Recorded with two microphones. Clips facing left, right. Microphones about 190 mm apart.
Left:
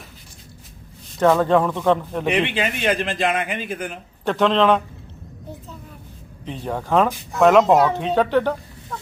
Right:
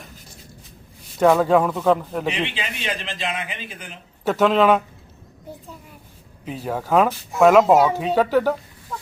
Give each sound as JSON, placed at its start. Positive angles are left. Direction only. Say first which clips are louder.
{"t": 1.2, "sound": "speech", "louder": "even", "side_deg": -5}
{"t": 2.2, "sound": "a man's voice", "louder": "left 5 dB", "side_deg": 55}
{"t": 4.3, "sound": "speech", "louder": "right 1 dB", "side_deg": -5}
{"t": 6.4, "sound": "speech", "louder": "even", "side_deg": -5}